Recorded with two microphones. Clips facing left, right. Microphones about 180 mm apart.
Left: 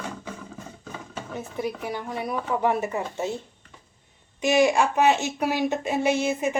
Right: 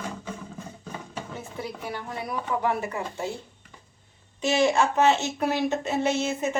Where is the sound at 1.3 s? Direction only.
15° left (ahead or behind).